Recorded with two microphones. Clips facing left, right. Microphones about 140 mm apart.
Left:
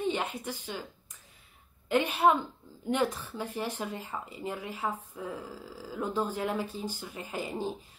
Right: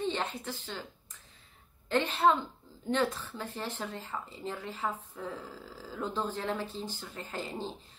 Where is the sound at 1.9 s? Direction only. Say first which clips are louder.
Left 2 dB; 10° left (ahead or behind).